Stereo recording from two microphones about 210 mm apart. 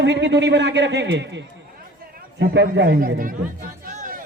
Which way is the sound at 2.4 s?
55° right (ahead or behind).